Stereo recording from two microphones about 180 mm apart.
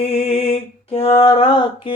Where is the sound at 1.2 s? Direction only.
30° left (ahead or behind).